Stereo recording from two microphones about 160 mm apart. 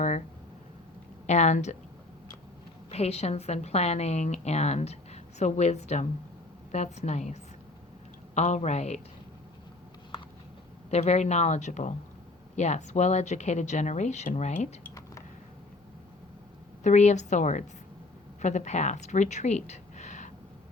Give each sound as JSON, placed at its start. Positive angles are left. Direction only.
{"t": 1.3, "sound": "a woman's voice", "side_deg": 45}
{"t": 2.9, "sound": "a woman's voice", "side_deg": 40}
{"t": 8.4, "sound": "a woman's voice", "side_deg": 45}
{"t": 10.9, "sound": "a woman's voice", "side_deg": 45}
{"t": 16.8, "sound": "a woman's voice", "side_deg": 45}